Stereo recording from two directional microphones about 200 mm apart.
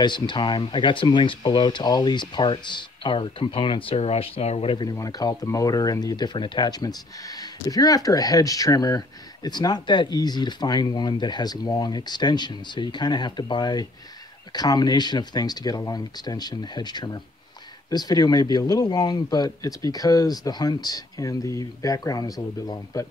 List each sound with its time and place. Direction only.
0.0 s speech: 25° left (ahead or behind)